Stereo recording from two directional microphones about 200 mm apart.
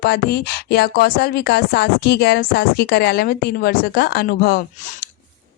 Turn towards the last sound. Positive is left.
turn(degrees=50)  # may be behind; listen again after turning